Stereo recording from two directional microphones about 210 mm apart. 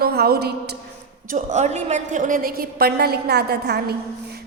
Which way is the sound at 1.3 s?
35° right (ahead or behind).